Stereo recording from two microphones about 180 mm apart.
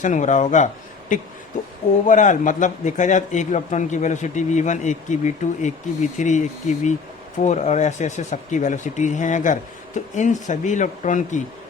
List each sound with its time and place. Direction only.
0.0 s a man's voice: 40° left (ahead or behind)
2.0 s a man's voice: 45° left (ahead or behind)